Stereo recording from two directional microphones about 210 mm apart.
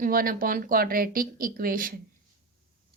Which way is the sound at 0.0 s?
40° right (ahead or behind).